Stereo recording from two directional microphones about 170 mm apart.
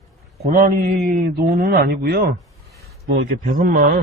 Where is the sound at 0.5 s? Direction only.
55° right (ahead or behind).